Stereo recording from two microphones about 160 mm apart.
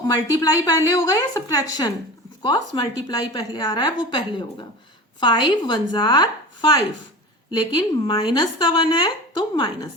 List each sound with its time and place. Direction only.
0.3 s a woman's voice: 20° left (ahead or behind)